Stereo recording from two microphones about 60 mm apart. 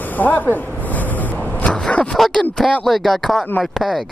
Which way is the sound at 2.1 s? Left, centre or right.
Centre.